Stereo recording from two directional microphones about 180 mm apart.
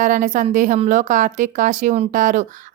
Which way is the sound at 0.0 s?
45° right (ahead or behind).